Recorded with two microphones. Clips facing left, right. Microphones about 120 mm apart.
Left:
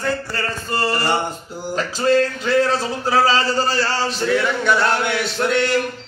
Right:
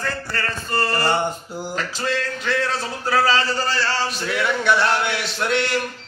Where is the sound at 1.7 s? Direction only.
30° left (ahead or behind).